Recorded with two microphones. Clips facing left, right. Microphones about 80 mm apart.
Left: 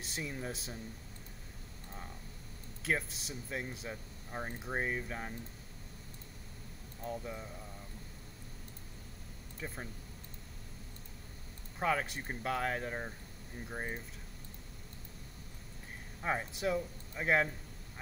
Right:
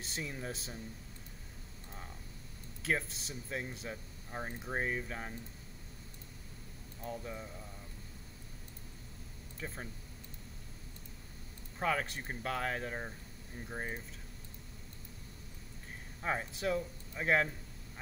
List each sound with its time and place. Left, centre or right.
0.0 s speech: centre
1.9 s a sound: centre
2.8 s speech: centre
7.0 s speech: centre
9.6 s speech: centre
11.8 s speech: centre
16.2 s speech: centre